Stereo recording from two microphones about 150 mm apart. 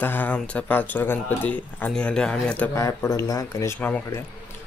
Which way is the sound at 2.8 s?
20° left (ahead or behind).